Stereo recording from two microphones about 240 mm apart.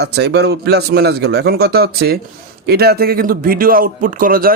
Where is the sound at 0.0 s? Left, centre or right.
Right.